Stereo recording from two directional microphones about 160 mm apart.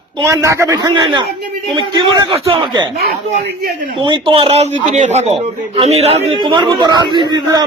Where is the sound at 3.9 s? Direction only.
30° right (ahead or behind).